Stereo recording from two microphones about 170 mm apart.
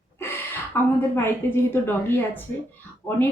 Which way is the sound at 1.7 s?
15° left (ahead or behind).